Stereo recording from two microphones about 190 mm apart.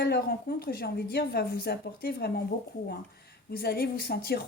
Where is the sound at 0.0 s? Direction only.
55° left (ahead or behind).